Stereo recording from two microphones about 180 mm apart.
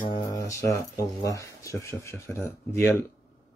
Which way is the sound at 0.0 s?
25° left (ahead or behind).